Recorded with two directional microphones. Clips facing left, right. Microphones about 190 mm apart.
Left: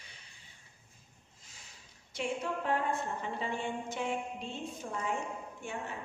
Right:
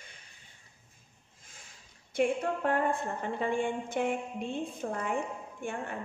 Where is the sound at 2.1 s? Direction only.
55° right (ahead or behind).